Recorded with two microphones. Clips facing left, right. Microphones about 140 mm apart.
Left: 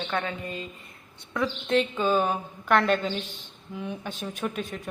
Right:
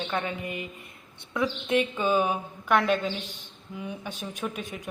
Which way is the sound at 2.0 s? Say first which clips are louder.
Left 1 dB; 10° right (ahead or behind).